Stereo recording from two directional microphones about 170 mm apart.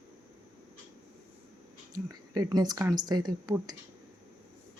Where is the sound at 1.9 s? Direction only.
20° right (ahead or behind).